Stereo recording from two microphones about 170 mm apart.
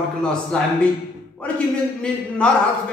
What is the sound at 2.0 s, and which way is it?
Speech, 5° left (ahead or behind).